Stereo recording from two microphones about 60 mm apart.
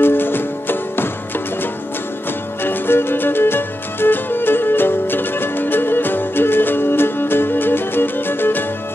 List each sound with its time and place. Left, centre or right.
0.0 s music: left
2.6 s music: left